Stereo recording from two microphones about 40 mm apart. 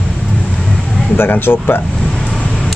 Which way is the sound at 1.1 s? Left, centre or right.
Left.